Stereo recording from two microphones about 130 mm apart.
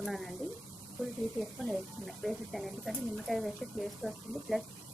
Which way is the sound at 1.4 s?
Centre (ahead or behind).